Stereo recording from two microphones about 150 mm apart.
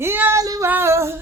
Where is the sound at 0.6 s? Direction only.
15° right (ahead or behind).